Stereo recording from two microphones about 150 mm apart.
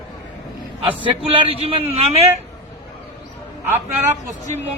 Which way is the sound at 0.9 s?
35° right (ahead or behind).